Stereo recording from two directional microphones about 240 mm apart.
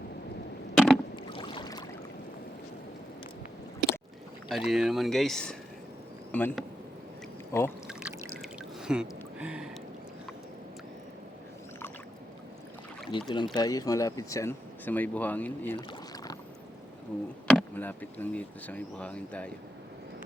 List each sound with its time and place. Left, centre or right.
1.1 s rowboat: centre
4.4 s speech: centre
7.9 s a sound: centre
13.1 s speech: centre
15.9 s rowboat: centre
17.1 s speech: centre